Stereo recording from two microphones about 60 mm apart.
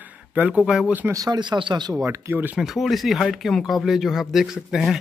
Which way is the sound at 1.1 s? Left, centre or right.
Right.